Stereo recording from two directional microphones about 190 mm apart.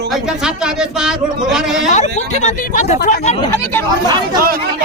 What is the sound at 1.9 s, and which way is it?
Speech, 40° left (ahead or behind).